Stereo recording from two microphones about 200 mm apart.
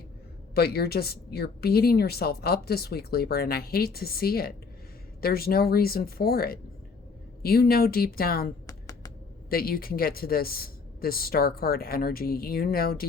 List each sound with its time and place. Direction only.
0.5 s a woman's voice: 50° left (ahead or behind)
8.6 s a sound: 15° left (ahead or behind)
9.5 s a woman's voice: 50° left (ahead or behind)